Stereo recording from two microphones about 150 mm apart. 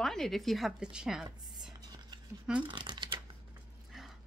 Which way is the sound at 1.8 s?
30° right (ahead or behind).